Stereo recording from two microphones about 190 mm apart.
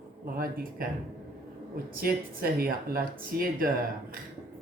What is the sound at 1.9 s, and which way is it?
Speech, 50° right (ahead or behind).